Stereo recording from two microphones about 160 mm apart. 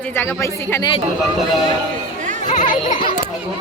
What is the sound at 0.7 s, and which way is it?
Speech, 25° left (ahead or behind).